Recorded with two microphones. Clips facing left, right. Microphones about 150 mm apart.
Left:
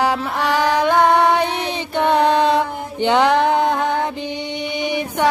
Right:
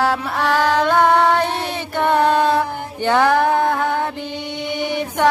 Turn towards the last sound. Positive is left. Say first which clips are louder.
# right 1 dB
turn(degrees=15)  # may be behind; listen again after turning